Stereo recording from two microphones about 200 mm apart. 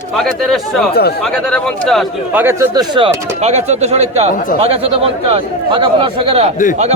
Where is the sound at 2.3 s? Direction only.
10° right (ahead or behind).